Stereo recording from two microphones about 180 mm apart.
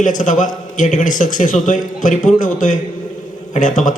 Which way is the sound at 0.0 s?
45° left (ahead or behind).